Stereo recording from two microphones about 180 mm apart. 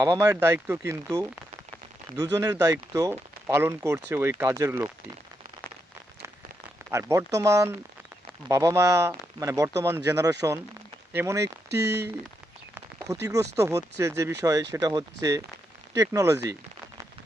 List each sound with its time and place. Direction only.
0.0 s speech: 15° right (ahead or behind)
6.9 s speech: 15° right (ahead or behind)